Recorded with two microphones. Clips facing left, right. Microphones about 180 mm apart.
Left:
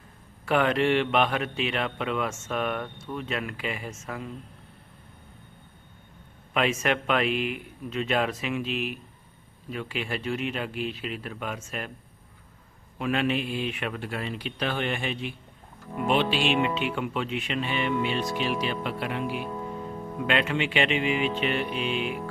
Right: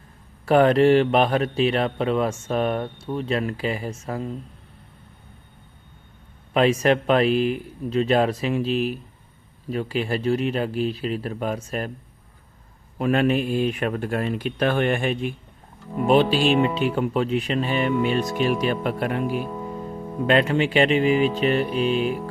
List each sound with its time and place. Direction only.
0.4 s a man's voice: 40° right (ahead or behind)
6.5 s a man's voice: 35° right (ahead or behind)
13.0 s a man's voice: 45° right (ahead or behind)